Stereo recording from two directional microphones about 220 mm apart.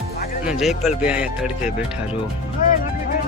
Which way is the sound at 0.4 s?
Centre (ahead or behind).